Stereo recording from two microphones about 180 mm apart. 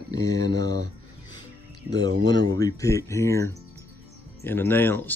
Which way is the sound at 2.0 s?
20° left (ahead or behind).